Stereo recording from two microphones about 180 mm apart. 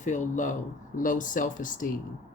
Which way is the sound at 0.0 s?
45° left (ahead or behind).